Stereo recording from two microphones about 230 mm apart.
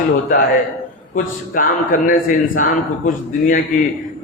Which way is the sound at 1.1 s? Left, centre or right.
Left.